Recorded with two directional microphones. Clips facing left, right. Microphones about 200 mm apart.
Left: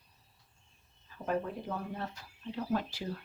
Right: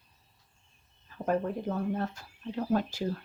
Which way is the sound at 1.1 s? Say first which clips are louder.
Right 5 dB; 45° right (ahead or behind).